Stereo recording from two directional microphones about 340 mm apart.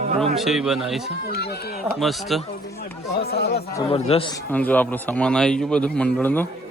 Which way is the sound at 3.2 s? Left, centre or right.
Left.